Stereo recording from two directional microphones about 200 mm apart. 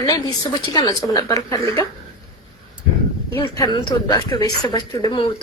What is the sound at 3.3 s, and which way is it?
Speech, 20° left (ahead or behind).